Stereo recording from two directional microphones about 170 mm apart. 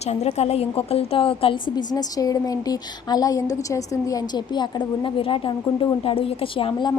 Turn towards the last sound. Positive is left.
turn(degrees=30)  # may be behind; listen again after turning